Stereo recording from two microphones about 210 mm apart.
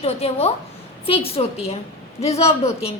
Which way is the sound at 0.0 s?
30° left (ahead or behind).